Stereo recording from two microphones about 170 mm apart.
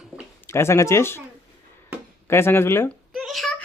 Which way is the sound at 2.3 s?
15° left (ahead or behind).